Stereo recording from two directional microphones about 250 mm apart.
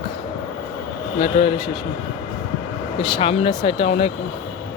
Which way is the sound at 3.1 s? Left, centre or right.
Left.